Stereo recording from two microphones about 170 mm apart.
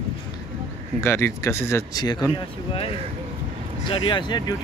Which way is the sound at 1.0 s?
15° left (ahead or behind).